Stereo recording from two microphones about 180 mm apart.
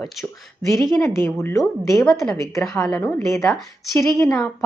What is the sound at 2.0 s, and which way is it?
Speech, 5° left (ahead or behind).